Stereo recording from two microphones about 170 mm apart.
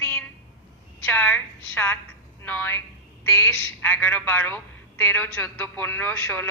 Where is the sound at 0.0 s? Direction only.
15° left (ahead or behind).